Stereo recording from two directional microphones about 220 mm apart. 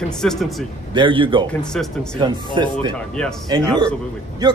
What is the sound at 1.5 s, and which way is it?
Speech, 5° left (ahead or behind).